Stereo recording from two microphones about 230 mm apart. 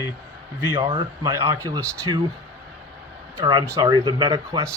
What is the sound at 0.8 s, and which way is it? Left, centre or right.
Speech, centre.